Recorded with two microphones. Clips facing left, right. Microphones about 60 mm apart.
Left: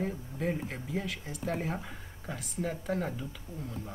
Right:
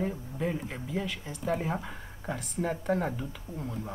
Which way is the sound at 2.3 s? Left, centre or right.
Centre.